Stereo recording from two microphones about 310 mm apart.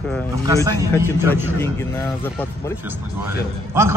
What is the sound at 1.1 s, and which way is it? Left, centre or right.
Speech, centre.